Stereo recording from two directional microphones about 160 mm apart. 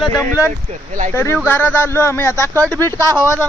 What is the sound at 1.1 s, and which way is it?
Speech, 15° left (ahead or behind).